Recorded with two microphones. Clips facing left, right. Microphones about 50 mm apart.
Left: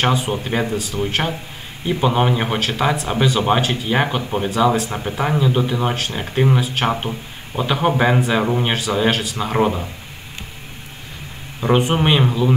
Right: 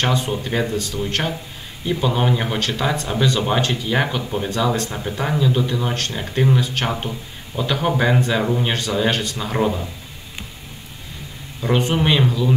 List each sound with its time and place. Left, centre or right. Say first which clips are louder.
0.0 s a man's voice: left 2 dB; centre
7.0 s a man's voice: left 2 dB; left
8.7 s speech: left 2 dB; centre
11.9 s a man's voice: left 1 dB; centre